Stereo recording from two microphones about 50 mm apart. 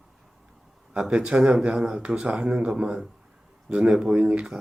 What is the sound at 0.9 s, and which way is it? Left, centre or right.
Speech, centre.